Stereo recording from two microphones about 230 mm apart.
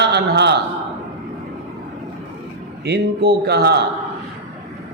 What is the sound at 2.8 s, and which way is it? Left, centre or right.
Speech, right.